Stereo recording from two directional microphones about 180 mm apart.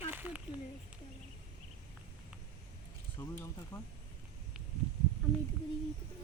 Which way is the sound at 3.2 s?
15° left (ahead or behind).